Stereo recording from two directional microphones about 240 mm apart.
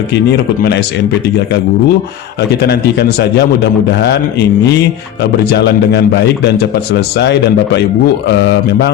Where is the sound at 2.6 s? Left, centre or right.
Left.